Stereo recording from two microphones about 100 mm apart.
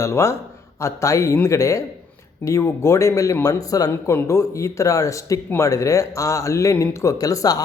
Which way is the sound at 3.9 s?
25° left (ahead or behind).